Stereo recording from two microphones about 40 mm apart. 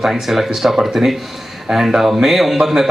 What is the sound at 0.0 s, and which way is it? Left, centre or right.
A man's voice, centre.